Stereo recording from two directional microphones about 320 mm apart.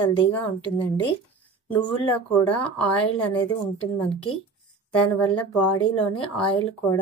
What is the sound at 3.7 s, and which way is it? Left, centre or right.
Speech, centre.